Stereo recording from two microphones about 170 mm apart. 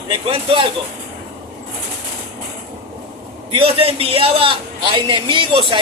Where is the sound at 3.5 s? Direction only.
35° right (ahead or behind).